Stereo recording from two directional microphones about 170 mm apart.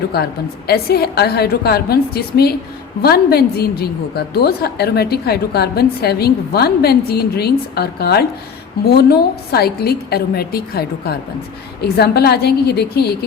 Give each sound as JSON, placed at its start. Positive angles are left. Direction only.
{"t": 0.1, "sound": "a woman's voice", "side_deg": 70}